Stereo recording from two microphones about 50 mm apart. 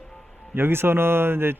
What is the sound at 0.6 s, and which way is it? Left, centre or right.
Speech, right.